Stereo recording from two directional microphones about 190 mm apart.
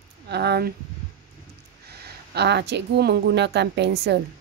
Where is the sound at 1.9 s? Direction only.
60° right (ahead or behind).